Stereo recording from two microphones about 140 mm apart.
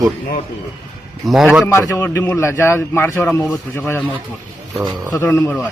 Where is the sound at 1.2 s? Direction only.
5° right (ahead or behind).